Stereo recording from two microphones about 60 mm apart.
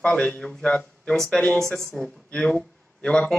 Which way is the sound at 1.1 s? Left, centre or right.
Centre.